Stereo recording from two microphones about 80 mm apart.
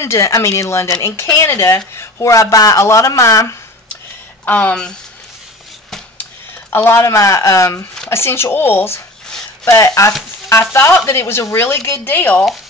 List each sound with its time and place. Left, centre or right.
0.0 s speech: left
4.5 s speech: centre
6.7 s speech: left
9.7 s speech: left